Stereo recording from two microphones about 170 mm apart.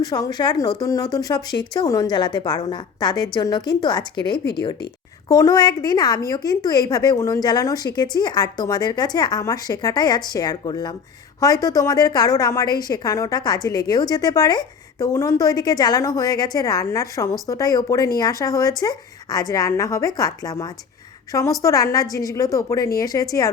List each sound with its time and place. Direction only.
0.0 s a woman's voice: 25° left (ahead or behind)
5.3 s a woman's voice: 20° left (ahead or behind)